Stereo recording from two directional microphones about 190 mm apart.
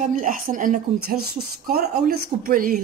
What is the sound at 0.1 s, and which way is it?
A woman's voice, 45° right (ahead or behind).